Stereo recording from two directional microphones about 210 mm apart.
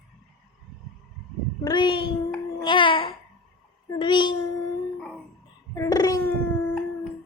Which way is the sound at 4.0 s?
20° left (ahead or behind).